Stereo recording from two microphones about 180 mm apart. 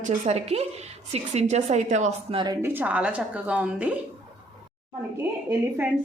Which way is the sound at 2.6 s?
10° right (ahead or behind).